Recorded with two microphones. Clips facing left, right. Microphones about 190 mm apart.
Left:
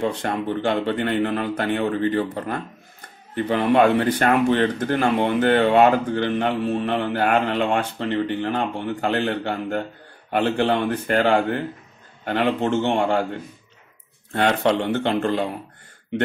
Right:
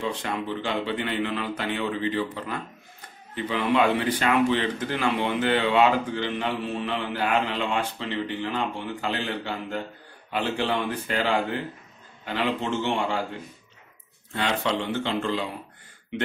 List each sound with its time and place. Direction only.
0.0 s speech: 50° left (ahead or behind)